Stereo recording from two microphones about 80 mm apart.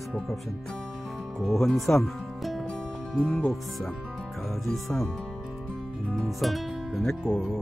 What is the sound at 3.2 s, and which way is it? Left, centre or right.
Speech, centre.